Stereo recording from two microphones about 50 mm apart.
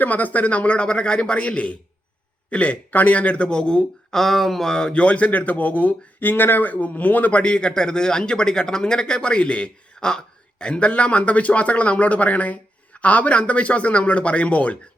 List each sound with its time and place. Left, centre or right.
0.0 s speech: left; by 4.2 s centre
4.2 s speech: centre; by 14.8 s left